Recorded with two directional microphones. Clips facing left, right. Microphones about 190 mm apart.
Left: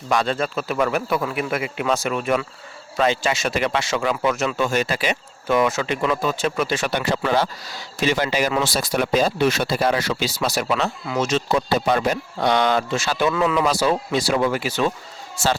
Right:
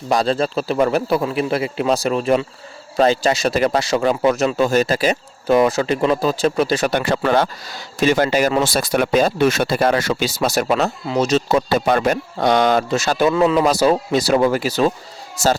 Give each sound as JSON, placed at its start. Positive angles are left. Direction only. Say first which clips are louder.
{"t": 0.1, "sound": "speech", "louder": "right 4 dB", "side_deg": -35}